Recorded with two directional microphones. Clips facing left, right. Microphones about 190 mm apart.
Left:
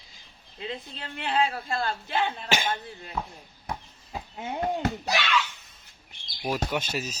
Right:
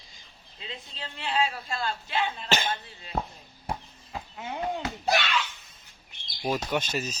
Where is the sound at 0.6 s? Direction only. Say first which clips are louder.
Left 5 dB; 55° left (ahead or behind).